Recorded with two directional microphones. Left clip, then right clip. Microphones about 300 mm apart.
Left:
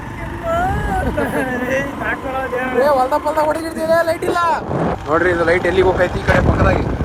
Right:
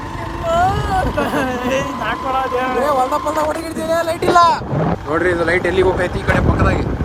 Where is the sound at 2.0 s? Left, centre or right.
Centre.